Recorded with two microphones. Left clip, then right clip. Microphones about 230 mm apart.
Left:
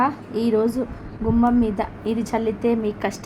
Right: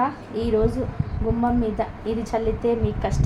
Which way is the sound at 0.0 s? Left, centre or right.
Left.